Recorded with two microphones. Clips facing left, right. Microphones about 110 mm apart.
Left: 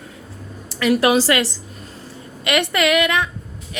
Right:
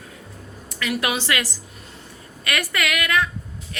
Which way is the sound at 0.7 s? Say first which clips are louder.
Left 9 dB; 35° left (ahead or behind).